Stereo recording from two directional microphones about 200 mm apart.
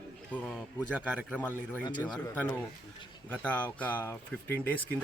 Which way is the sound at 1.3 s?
10° left (ahead or behind).